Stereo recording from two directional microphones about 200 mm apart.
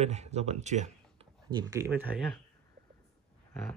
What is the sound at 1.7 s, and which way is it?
Speech, 10° right (ahead or behind).